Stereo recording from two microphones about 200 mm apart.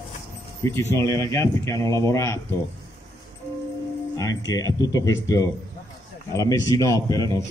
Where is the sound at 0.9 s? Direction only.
15° left (ahead or behind).